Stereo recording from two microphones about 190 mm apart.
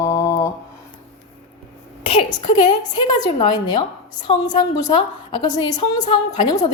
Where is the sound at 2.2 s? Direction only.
20° left (ahead or behind).